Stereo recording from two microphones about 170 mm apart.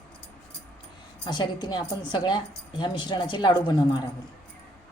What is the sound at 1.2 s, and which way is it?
A woman's voice, 25° left (ahead or behind).